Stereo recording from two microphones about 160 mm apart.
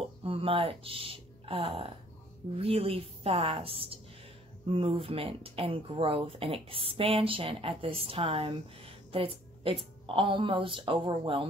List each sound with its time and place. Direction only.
0.0 s speech: 35° right (ahead or behind)